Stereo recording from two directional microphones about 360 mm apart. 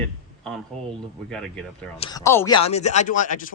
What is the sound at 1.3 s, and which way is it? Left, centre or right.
Speech, centre.